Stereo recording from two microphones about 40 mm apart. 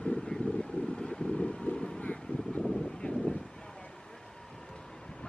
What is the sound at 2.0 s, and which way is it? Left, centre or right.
Vehicle, left.